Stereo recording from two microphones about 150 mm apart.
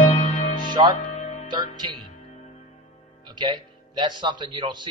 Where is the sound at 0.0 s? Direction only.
45° left (ahead or behind).